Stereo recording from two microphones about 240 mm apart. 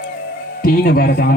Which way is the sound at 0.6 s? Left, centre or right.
Left.